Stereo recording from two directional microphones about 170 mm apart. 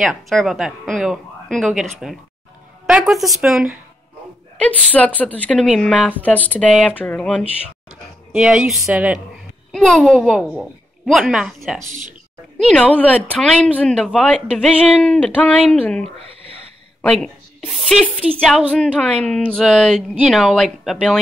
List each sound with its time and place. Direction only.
0.0 s speech: centre (ahead or behind)
11.8 s speech: 45° right (ahead or behind)
12.5 s a woman's voice: 5° left (ahead or behind)
18.7 s speech: 5° left (ahead or behind)